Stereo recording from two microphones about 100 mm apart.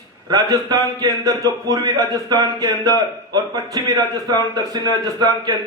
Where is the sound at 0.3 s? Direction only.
40° right (ahead or behind).